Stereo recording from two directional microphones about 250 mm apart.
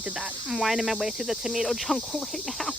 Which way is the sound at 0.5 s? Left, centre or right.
Centre.